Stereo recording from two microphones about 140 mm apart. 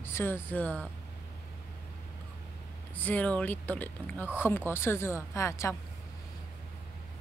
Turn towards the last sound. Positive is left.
turn(degrees=20)  # may be behind; listen again after turning